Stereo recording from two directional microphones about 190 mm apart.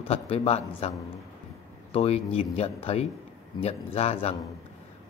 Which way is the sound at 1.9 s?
30° left (ahead or behind).